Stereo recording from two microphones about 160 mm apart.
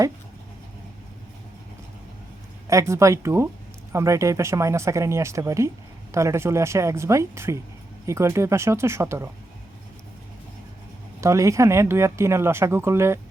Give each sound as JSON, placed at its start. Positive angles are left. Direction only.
{"t": 2.6, "sound": "speech", "side_deg": -20}
{"t": 11.2, "sound": "speech", "side_deg": -20}